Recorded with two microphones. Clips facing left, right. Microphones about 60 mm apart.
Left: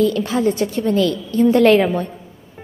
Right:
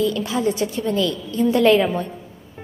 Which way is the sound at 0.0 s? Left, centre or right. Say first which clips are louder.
Left 4 dB; left.